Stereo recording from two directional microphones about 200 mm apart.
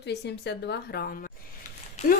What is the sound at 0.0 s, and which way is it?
A woman's voice, 55° left (ahead or behind).